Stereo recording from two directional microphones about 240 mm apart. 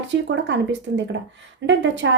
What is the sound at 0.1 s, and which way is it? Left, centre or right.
A woman's voice, right.